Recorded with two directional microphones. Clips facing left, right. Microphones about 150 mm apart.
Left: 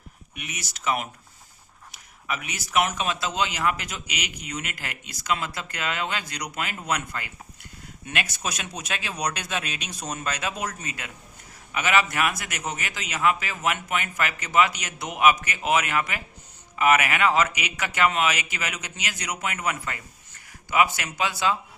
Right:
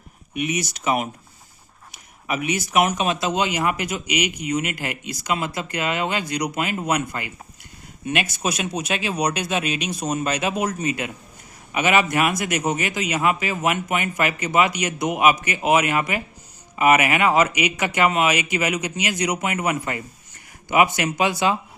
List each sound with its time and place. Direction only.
0.3 s a man's voice: 15° right (ahead or behind)